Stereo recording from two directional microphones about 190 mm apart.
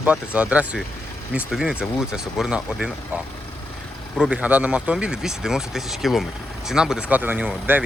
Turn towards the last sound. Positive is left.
turn(degrees=-10)  # may be behind; listen again after turning